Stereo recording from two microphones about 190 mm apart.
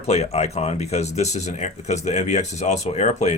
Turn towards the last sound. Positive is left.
turn(degrees=35)  # may be behind; listen again after turning